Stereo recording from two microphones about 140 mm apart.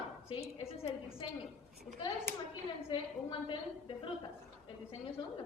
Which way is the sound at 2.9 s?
35° left (ahead or behind).